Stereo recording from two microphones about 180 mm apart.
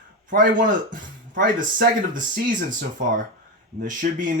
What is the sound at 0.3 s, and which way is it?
Speech, 50° right (ahead or behind).